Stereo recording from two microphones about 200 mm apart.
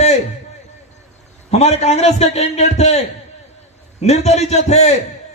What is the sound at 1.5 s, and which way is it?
A man's voice, 30° left (ahead or behind).